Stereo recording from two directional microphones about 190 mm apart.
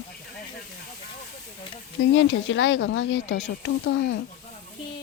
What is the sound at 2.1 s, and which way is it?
Speech, 75° left (ahead or behind).